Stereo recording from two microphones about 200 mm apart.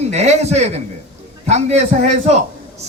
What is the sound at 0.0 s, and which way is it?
A man's voice, 35° right (ahead or behind).